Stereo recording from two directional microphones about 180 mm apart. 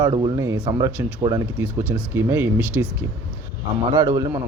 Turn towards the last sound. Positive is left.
turn(degrees=-20)  # may be behind; listen again after turning